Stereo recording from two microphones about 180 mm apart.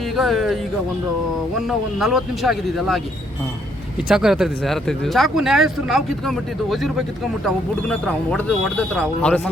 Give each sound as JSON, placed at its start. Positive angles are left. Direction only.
{"t": 0.2, "sound": "speech", "side_deg": 0}
{"t": 4.1, "sound": "speech", "side_deg": 0}